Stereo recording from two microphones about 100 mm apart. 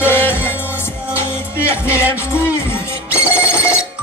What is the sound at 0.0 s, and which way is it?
Music, 20° left (ahead or behind).